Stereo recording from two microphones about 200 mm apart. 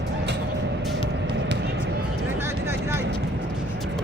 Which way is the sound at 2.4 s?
10° right (ahead or behind).